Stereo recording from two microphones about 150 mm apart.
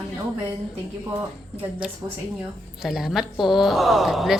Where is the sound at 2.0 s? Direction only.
25° right (ahead or behind).